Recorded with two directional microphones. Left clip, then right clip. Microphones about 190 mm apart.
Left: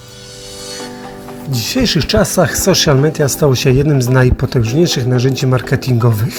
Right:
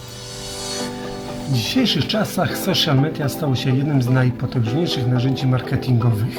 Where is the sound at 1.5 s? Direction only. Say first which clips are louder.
Left 4 dB; 45° left (ahead or behind).